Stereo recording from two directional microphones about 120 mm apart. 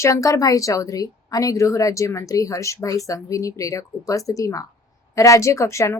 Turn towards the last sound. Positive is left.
turn(degrees=25)  # may be behind; listen again after turning